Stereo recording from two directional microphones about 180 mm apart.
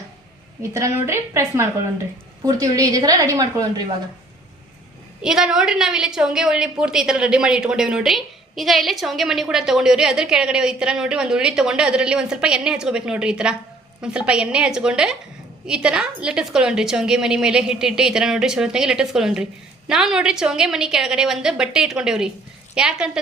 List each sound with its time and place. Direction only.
0.6 s a woman's voice: 15° right (ahead or behind)
5.2 s a woman's voice: 5° right (ahead or behind)